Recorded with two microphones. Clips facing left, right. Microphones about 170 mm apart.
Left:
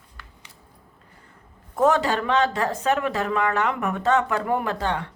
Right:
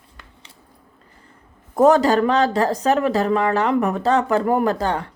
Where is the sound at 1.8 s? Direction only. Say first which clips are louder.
Right 6 dB; 40° right (ahead or behind).